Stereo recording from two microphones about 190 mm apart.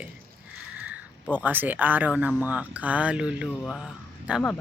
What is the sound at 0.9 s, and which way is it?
Speech, 5° right (ahead or behind).